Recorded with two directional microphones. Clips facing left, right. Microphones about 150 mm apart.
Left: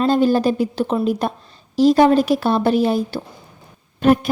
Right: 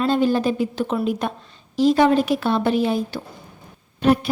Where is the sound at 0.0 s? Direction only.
40° left (ahead or behind).